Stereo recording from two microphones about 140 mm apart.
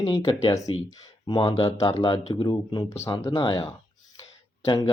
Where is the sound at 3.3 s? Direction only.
35° left (ahead or behind).